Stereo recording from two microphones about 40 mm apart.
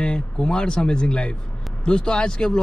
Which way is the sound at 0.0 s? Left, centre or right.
Left.